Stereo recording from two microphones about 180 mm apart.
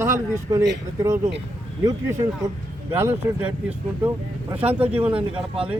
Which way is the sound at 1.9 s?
20° right (ahead or behind).